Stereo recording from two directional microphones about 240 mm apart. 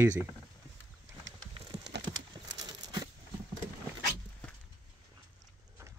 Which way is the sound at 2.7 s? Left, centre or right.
Centre.